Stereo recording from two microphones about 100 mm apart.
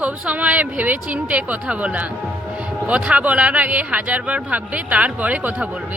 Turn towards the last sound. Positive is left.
turn(degrees=-15)  # may be behind; listen again after turning